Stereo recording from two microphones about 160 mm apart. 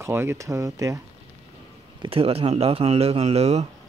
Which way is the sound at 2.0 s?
35° right (ahead or behind).